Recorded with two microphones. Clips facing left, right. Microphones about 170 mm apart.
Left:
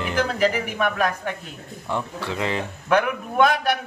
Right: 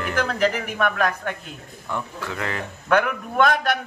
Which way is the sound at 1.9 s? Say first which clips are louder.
Left 2 dB; 20° left (ahead or behind).